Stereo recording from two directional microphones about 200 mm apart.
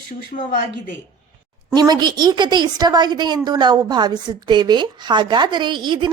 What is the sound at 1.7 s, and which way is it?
A woman's voice, 20° right (ahead or behind).